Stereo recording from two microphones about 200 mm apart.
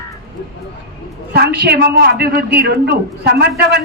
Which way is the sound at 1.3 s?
55° right (ahead or behind).